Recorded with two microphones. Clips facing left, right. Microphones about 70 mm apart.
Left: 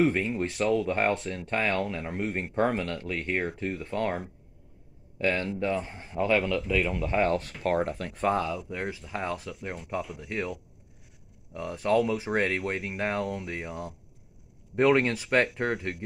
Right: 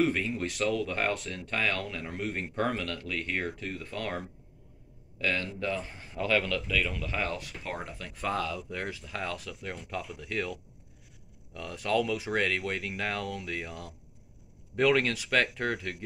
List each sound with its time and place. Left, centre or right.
0.0 s speech: left